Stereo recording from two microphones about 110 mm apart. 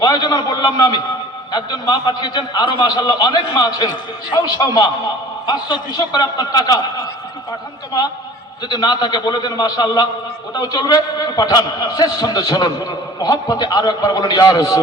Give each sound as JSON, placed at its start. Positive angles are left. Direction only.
{"t": 0.0, "sound": "a man's voice", "side_deg": 35}
{"t": 8.7, "sound": "a man's voice", "side_deg": 40}